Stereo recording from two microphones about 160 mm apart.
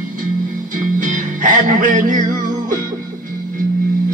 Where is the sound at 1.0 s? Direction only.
55° right (ahead or behind).